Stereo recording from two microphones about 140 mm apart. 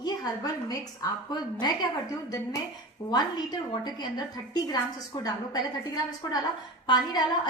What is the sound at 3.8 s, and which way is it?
Speech, 30° left (ahead or behind).